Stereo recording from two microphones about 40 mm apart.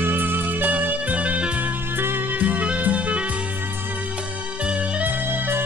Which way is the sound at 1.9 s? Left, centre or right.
Right.